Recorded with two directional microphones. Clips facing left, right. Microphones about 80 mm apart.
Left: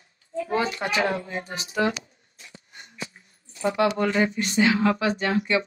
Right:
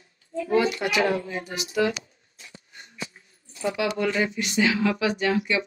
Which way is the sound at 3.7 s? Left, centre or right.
Left.